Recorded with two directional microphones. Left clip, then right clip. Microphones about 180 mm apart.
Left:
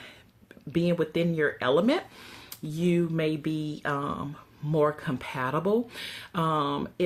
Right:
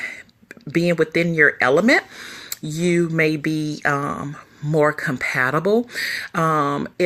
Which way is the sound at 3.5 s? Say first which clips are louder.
Right 8 dB; 15° right (ahead or behind).